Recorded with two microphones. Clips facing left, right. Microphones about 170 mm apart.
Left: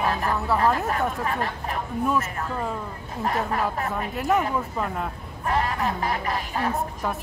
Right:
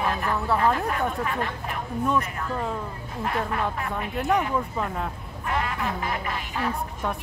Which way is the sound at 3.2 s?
40° left (ahead or behind).